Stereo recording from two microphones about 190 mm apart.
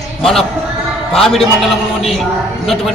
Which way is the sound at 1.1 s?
Centre (ahead or behind).